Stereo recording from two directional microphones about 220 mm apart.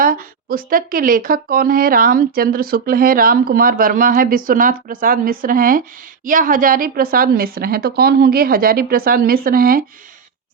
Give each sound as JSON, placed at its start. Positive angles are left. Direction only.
{"t": 0.0, "sound": "speech", "side_deg": -40}